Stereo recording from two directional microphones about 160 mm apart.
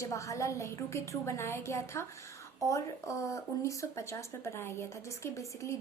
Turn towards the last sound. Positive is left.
turn(degrees=20)  # may be behind; listen again after turning